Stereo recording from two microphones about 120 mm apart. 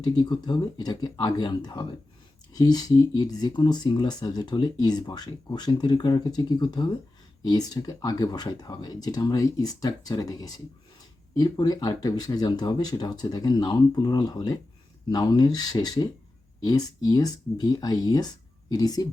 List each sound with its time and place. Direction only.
0.0 s speech: 35° left (ahead or behind)